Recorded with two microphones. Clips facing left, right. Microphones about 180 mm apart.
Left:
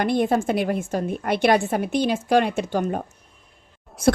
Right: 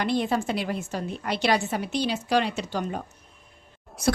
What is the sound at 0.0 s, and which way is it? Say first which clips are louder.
A woman's voice: left 5 dB; 50° left (ahead or behind).